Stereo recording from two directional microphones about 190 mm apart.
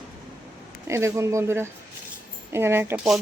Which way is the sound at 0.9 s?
15° right (ahead or behind).